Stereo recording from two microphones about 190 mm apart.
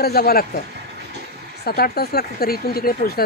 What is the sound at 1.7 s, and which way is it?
Speech, 55° left (ahead or behind).